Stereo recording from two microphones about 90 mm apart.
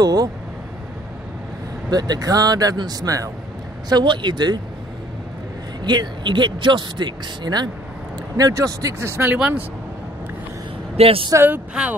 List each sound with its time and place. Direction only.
0.0 s speech: 45° right (ahead or behind)
1.9 s speech: 50° right (ahead or behind)
3.9 s speech: 60° right (ahead or behind)
5.9 s speech: 55° right (ahead or behind)
8.4 s speech: 45° right (ahead or behind)
9.3 s speech: 20° right (ahead or behind)
11.0 s speech: 90° right
11.3 s speech: 20° right (ahead or behind)